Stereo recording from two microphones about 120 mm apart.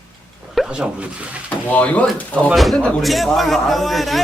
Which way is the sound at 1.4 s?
10° left (ahead or behind).